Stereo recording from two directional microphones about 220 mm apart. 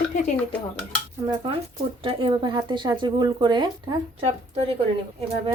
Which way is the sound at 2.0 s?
20° right (ahead or behind).